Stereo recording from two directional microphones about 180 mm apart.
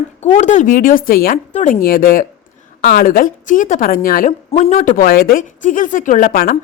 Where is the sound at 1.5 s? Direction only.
40° left (ahead or behind).